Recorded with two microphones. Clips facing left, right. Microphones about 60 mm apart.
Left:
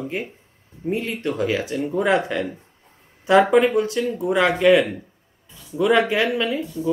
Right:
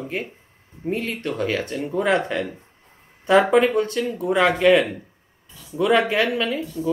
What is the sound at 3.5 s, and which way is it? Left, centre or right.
Speech, centre.